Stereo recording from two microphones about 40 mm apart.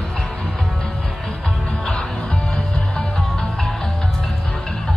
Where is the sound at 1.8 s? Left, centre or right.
Left.